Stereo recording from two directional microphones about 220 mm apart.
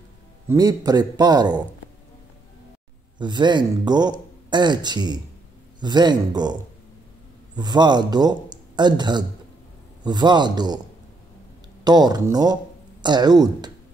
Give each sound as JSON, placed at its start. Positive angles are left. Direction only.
{"t": 0.5, "sound": "a man's voice", "side_deg": -15}
{"t": 3.2, "sound": "speech", "side_deg": -20}
{"t": 7.5, "sound": "speech", "side_deg": -20}
{"t": 11.8, "sound": "speech", "side_deg": -20}